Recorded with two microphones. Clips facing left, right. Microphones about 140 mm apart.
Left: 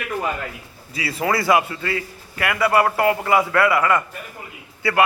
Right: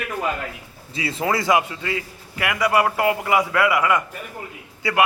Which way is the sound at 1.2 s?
20° right (ahead or behind).